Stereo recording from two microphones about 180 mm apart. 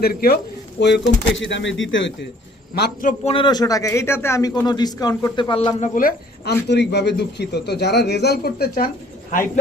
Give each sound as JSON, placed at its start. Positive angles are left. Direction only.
{"t": 0.0, "sound": "a man's voice", "side_deg": 55}
{"t": 0.8, "sound": "speech", "side_deg": 70}
{"t": 1.4, "sound": "speech", "side_deg": 90}
{"t": 2.7, "sound": "a man's voice", "side_deg": 55}
{"t": 3.2, "sound": "a man's voice", "side_deg": 25}
{"t": 5.8, "sound": "speech", "side_deg": 50}